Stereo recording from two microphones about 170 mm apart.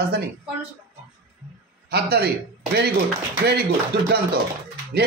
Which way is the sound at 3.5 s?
70° right (ahead or behind).